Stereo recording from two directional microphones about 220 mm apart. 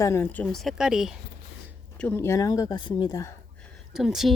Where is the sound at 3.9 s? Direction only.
Centre (ahead or behind).